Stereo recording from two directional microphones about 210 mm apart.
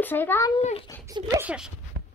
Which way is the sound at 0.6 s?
30° left (ahead or behind).